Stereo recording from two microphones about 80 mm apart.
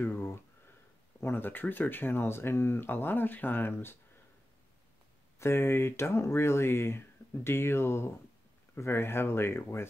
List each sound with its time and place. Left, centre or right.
0.0 s a sound: left
1.2 s speech: left
5.4 s speech: left